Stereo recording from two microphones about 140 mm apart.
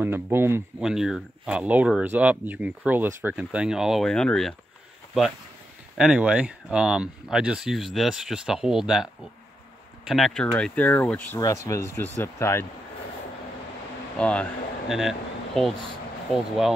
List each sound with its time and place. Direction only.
0.0 s speech: 15° right (ahead or behind)
0.7 s speech: 5° right (ahead or behind)
5.9 s speech: 5° right (ahead or behind); by 11.3 s 10° left (ahead or behind)
11.3 s speech: 20° left (ahead or behind)
14.1 s speech: 10° left (ahead or behind)